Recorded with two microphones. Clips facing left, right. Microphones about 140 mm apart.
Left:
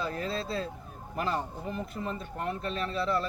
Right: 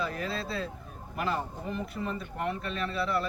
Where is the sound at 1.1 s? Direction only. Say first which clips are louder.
Even; 35° left (ahead or behind).